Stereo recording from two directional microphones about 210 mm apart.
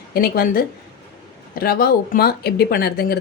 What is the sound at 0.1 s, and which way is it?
Speech, 45° left (ahead or behind).